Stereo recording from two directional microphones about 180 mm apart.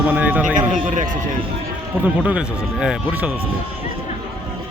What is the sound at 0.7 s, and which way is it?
Speech, 45° right (ahead or behind).